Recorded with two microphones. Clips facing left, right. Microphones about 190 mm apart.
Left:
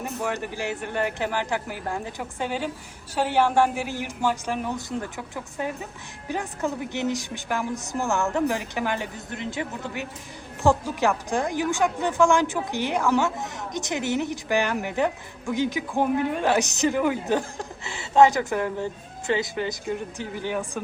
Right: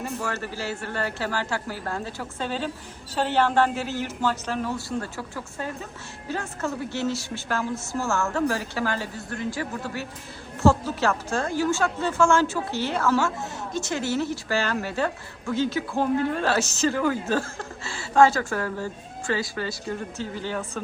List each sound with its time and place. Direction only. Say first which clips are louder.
0.0 s a woman's voice: left 1 dB; 15° left (ahead or behind)